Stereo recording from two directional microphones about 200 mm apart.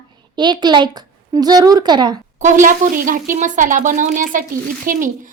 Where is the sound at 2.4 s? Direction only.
40° right (ahead or behind).